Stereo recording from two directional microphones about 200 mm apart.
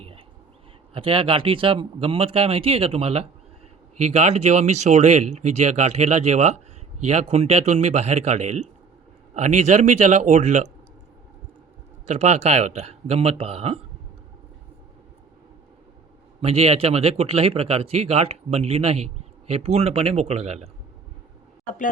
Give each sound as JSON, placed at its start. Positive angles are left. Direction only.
{"t": 0.9, "sound": "speech", "side_deg": -25}
{"t": 12.0, "sound": "speech", "side_deg": -35}
{"t": 16.4, "sound": "speech", "side_deg": -30}